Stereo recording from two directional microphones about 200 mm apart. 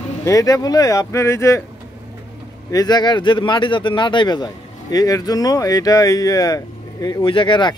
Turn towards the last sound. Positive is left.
turn(degrees=25)  # may be behind; listen again after turning